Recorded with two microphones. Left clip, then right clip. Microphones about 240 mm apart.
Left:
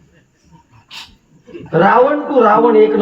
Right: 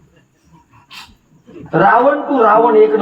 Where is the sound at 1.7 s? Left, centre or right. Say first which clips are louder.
Right 1 dB; right.